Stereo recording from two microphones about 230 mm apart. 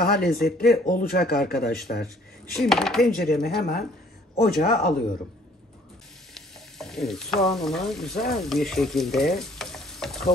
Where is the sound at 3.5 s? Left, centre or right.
Left.